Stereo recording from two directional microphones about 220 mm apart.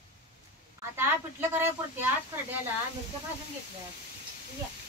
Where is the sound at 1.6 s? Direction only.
10° right (ahead or behind).